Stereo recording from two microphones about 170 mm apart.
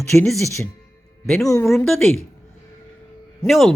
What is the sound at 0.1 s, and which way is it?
Speech, 5° left (ahead or behind).